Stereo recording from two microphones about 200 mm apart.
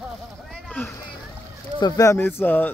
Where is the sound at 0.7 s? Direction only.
10° left (ahead or behind).